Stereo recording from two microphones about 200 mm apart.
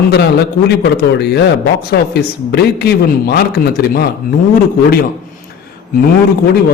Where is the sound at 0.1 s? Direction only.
55° left (ahead or behind).